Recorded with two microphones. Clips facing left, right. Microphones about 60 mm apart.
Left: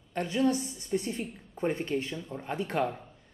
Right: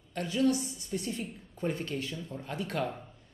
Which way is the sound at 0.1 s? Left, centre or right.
Left.